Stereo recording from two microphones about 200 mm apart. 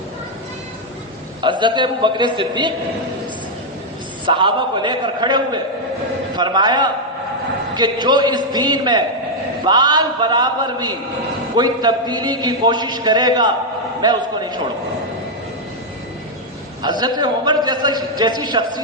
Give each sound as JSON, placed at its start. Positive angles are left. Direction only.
{"t": 1.4, "sound": "a man's voice", "side_deg": -25}
{"t": 4.3, "sound": "a man's voice", "side_deg": -25}
{"t": 16.8, "sound": "a man's voice", "side_deg": -20}